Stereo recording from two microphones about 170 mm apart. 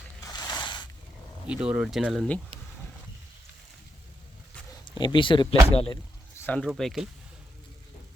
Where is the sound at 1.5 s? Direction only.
5° right (ahead or behind).